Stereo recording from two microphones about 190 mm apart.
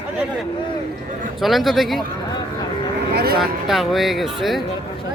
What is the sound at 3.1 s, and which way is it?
Speech, 55° right (ahead or behind).